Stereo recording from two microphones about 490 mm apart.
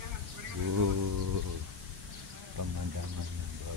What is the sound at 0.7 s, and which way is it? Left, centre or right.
Speech, right.